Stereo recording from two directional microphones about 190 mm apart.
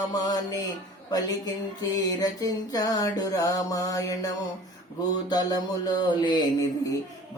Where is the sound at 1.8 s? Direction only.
20° left (ahead or behind).